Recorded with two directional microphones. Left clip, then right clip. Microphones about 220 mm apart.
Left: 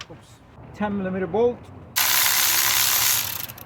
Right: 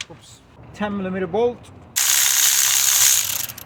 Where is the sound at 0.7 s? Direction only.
30° right (ahead or behind).